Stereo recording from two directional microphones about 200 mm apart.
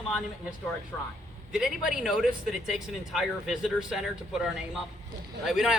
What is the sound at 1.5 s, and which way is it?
Speech, 5° right (ahead or behind).